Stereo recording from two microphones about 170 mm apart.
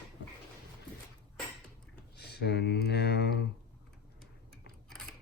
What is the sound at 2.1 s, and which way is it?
Speech, 75° left (ahead or behind).